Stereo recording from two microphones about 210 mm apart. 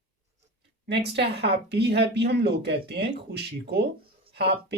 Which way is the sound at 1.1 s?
55° right (ahead or behind).